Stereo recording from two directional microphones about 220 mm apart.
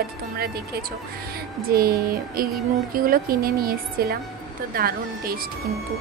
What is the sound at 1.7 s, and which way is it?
A woman's voice, 45° right (ahead or behind).